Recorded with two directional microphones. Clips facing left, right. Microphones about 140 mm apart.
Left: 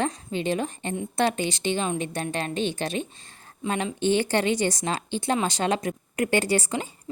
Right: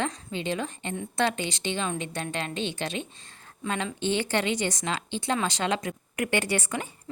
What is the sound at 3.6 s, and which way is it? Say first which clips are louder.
Speech: left 3 dB; 25° left (ahead or behind).